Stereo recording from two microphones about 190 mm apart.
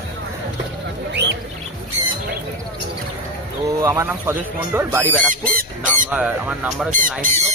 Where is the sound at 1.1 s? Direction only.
65° right (ahead or behind).